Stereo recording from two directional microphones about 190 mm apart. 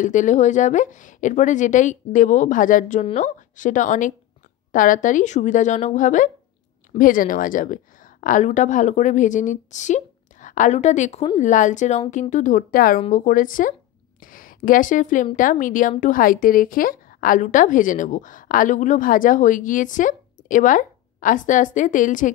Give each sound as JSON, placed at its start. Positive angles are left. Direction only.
{"t": 0.0, "sound": "a woman's voice", "side_deg": 40}